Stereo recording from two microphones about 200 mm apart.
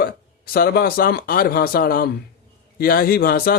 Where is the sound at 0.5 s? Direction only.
50° left (ahead or behind).